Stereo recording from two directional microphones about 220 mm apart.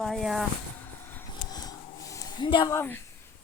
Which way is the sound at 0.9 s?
10° left (ahead or behind).